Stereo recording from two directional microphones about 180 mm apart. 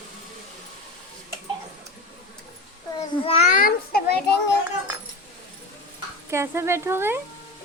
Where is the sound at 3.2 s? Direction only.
35° left (ahead or behind); by 4.6 s 60° left (ahead or behind).